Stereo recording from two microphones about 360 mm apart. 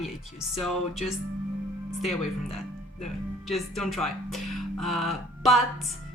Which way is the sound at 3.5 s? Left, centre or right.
Centre.